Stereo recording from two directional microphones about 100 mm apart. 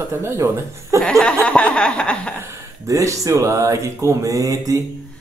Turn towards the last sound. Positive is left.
turn(degrees=-35)  # may be behind; listen again after turning